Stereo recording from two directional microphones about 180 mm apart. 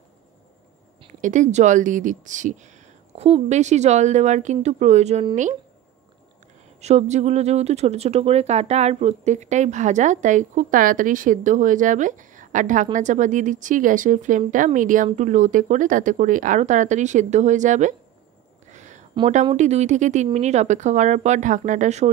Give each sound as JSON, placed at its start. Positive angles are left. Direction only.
{"t": 1.2, "sound": "speech", "side_deg": -45}
{"t": 6.8, "sound": "speech", "side_deg": -35}
{"t": 18.7, "sound": "a sound", "side_deg": -40}
{"t": 19.5, "sound": "speech", "side_deg": -40}